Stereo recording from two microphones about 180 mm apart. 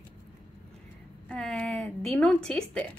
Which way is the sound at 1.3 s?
5° left (ahead or behind).